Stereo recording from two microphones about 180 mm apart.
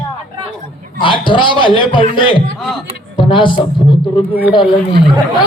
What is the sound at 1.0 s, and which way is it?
Speech, 25° left (ahead or behind).